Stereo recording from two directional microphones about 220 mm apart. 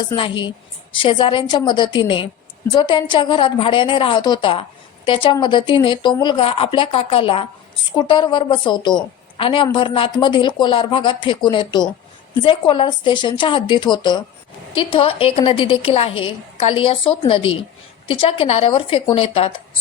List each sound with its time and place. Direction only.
0.9 s a woman's voice: 20° left (ahead or behind)